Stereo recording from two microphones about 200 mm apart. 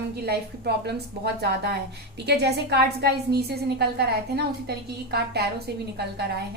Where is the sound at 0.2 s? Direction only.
55° right (ahead or behind).